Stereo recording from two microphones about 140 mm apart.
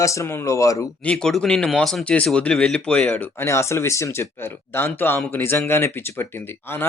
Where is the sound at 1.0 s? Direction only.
5° left (ahead or behind).